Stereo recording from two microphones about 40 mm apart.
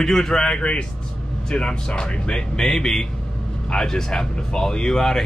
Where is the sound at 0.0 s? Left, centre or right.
Centre.